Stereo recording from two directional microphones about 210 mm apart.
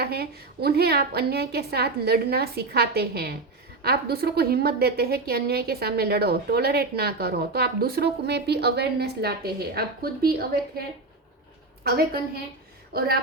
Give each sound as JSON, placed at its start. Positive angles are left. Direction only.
{"t": 0.0, "sound": "a woman's voice", "side_deg": -50}
{"t": 11.8, "sound": "a woman's voice", "side_deg": -50}